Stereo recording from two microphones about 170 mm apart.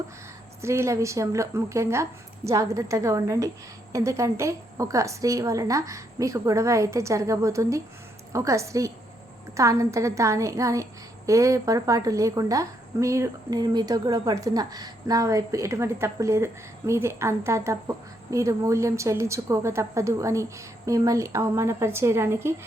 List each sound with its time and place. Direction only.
0.6 s a woman's voice: 15° right (ahead or behind)